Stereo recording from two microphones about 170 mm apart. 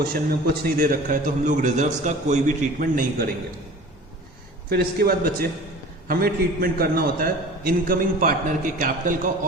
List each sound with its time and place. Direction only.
0.6 s a man's voice: 55° right (ahead or behind)
4.7 s a man's voice: 65° right (ahead or behind)